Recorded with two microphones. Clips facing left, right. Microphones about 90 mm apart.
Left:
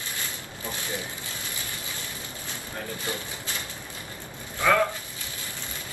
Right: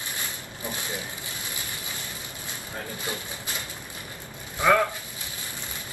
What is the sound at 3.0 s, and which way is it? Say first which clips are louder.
Speech: left 1 dB; 20° right (ahead or behind).